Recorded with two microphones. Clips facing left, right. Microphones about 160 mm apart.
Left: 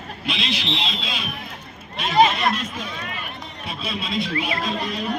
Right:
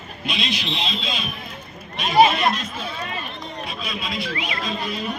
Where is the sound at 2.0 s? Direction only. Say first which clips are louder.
Right 1 dB; 15° right (ahead or behind).